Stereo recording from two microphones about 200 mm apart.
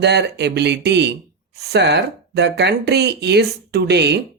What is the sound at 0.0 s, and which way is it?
Speech, 55° right (ahead or behind).